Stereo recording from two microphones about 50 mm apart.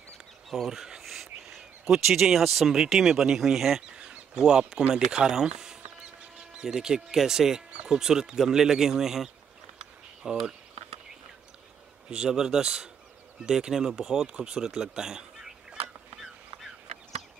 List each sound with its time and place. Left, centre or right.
0.5 s a sound: centre
1.5 s speech: centre
4.0 s speech: centre
12.1 s speech: centre